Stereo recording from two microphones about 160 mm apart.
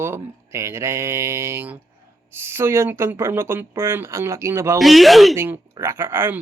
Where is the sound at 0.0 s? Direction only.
15° right (ahead or behind).